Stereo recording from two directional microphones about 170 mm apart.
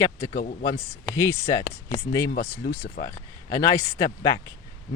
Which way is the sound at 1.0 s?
15° left (ahead or behind).